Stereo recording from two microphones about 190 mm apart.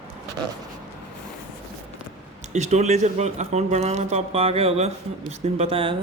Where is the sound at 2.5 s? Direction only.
35° right (ahead or behind).